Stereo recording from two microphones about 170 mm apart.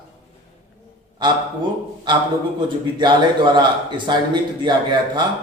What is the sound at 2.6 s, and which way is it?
A man's voice, 25° right (ahead or behind).